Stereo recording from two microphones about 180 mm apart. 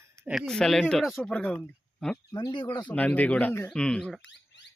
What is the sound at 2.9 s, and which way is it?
A man's voice, 10° left (ahead or behind).